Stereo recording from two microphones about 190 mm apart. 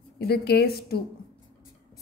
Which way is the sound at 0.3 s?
55° left (ahead or behind).